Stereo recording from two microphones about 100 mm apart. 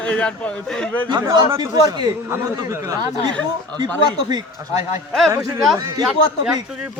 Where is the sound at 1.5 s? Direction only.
35° right (ahead or behind).